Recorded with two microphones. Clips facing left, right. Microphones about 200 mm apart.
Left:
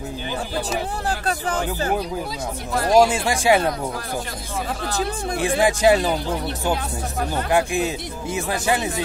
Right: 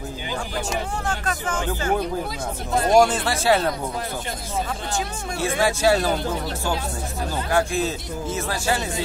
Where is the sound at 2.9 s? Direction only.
10° left (ahead or behind).